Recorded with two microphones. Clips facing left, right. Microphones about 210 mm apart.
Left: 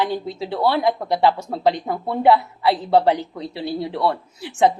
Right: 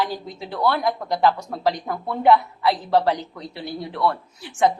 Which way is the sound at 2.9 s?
15° left (ahead or behind).